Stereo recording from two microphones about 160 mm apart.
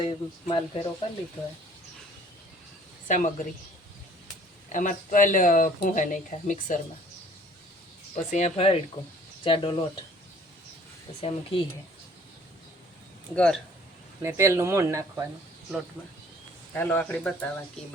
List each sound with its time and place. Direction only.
0.0 s speech: 30° left (ahead or behind)
3.1 s speech: 50° left (ahead or behind)
4.7 s speech: 55° left (ahead or behind)
8.1 s speech: 45° left (ahead or behind)
11.2 s speech: 35° left (ahead or behind)
13.3 s speech: 5° left (ahead or behind)
14.2 s speech: 15° right (ahead or behind)
16.0 s speech: 10° left (ahead or behind)